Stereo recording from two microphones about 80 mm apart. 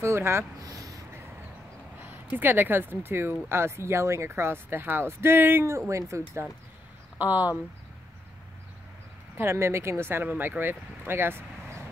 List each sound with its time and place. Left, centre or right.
0.0 s speech: right
0.6 s a sound: right
2.3 s speech: right
7.2 s speech: right
9.4 s speech: right